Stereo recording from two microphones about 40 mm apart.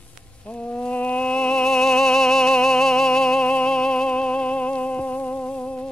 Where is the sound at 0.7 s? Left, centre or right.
Left.